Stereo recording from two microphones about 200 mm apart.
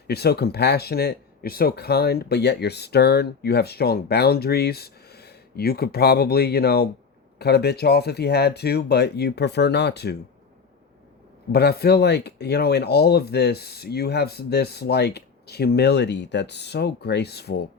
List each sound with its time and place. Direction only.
0.1 s speech: 55° left (ahead or behind)
11.5 s speech: 50° left (ahead or behind)